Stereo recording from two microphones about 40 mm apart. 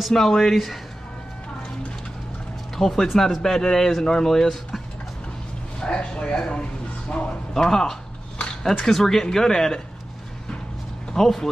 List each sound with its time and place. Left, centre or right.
0.1 s speech: centre
2.8 s speech: centre
5.8 s a man's voice: left
7.5 s speech: centre
11.1 s speech: centre